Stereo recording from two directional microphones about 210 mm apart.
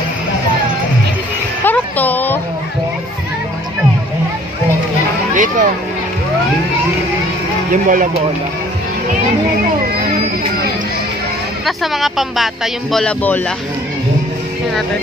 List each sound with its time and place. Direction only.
1.6 s music: 10° left (ahead or behind)
5.3 s a sound: 35° right (ahead or behind)
7.7 s speech: 40° right (ahead or behind)
11.6 s speech: centre (ahead or behind)